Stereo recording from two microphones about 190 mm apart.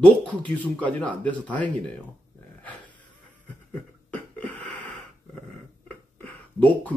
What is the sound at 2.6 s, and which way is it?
Dog, 10° left (ahead or behind).